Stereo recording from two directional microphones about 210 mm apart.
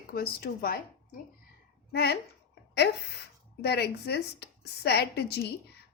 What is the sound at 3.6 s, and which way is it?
A woman's voice, 50° left (ahead or behind).